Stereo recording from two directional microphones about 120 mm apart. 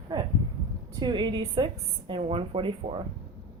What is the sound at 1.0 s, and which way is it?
Speech, 40° right (ahead or behind).